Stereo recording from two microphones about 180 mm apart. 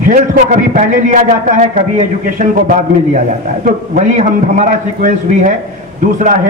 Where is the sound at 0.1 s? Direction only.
45° right (ahead or behind).